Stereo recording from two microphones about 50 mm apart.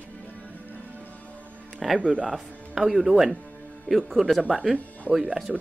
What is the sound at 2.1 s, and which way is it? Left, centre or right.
Speech, centre.